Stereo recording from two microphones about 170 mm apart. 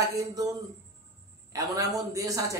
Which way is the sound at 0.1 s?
20° right (ahead or behind).